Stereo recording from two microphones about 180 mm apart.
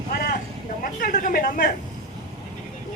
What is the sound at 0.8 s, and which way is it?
Speech, 50° left (ahead or behind).